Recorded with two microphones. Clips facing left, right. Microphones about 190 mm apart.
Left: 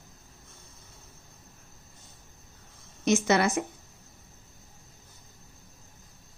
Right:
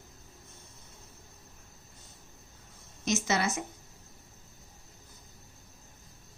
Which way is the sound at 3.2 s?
60° left (ahead or behind).